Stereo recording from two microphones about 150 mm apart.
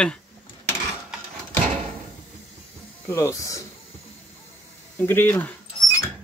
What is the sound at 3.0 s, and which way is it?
Speech, 20° left (ahead or behind).